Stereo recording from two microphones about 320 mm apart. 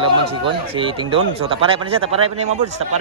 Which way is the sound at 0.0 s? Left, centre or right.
Centre.